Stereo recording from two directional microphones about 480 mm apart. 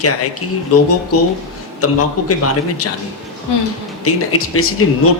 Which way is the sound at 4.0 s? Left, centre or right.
Left.